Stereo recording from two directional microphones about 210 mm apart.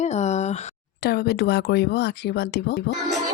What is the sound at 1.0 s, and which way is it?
Speech, 50° left (ahead or behind).